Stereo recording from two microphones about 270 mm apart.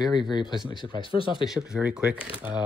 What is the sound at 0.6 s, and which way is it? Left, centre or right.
Speech, centre.